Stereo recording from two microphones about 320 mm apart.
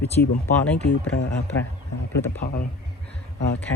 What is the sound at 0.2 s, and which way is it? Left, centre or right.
Speech, left.